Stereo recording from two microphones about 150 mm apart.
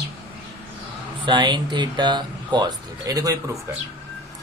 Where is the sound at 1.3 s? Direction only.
30° right (ahead or behind).